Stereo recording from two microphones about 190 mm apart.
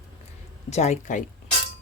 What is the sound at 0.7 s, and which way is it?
Speech, 35° left (ahead or behind).